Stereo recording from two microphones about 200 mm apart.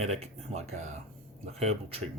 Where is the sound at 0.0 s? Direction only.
30° right (ahead or behind).